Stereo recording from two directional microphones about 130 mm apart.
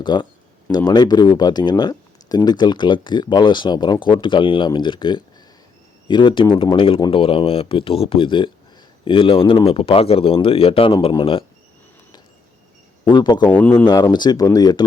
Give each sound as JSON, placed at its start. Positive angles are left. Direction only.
{"t": 0.0, "sound": "speech", "side_deg": 35}
{"t": 13.1, "sound": "speech", "side_deg": 35}
{"t": 13.5, "sound": "speech", "side_deg": 10}
{"t": 13.8, "sound": "speech", "side_deg": 30}